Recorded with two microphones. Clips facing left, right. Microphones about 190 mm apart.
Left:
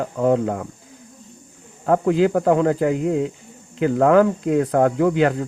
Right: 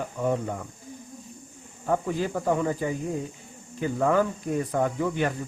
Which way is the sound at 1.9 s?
90° left.